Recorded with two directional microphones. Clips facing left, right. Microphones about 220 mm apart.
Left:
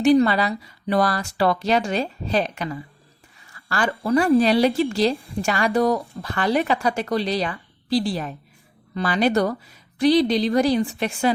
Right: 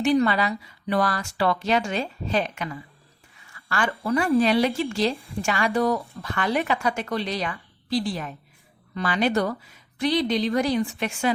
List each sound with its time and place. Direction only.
0.0 s a woman's voice: 35° left (ahead or behind)